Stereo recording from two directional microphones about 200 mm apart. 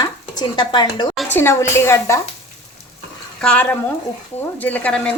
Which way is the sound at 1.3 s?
15° left (ahead or behind).